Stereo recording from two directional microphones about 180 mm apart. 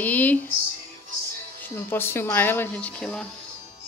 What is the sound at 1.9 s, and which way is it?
A woman's voice, 10° left (ahead or behind).